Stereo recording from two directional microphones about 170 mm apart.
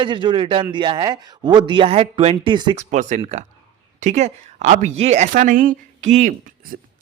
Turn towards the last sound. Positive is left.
turn(degrees=-45)  # may be behind; listen again after turning